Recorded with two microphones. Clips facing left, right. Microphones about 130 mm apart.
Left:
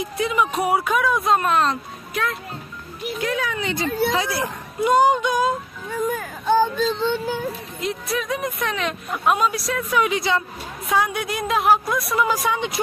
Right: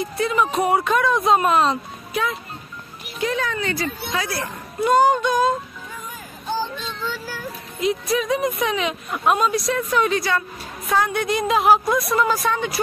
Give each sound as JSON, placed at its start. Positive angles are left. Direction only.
{"t": 0.0, "sound": "speech", "side_deg": 10}
{"t": 6.0, "sound": "a sound", "side_deg": 55}
{"t": 6.9, "sound": "child singing", "side_deg": 25}
{"t": 7.8, "sound": "speech", "side_deg": 0}
{"t": 10.1, "sound": "child singing", "side_deg": 20}
{"t": 10.9, "sound": "speech", "side_deg": 10}
{"t": 12.3, "sound": "speech", "side_deg": 15}